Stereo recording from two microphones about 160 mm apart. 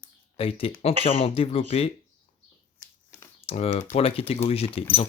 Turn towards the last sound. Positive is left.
turn(degrees=40)  # may be behind; listen again after turning